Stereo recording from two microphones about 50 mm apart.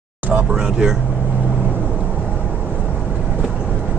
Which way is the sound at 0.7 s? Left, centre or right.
Centre.